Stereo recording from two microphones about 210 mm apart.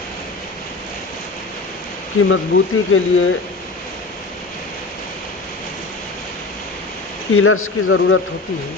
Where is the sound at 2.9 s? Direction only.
75° left (ahead or behind).